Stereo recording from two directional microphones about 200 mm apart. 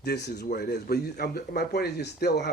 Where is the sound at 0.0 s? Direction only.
55° left (ahead or behind).